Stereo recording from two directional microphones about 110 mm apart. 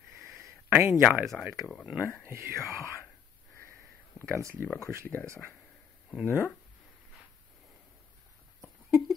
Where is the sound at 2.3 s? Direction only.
25° right (ahead or behind).